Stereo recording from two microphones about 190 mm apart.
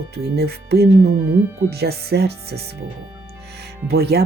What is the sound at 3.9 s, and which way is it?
Speech, 60° right (ahead or behind).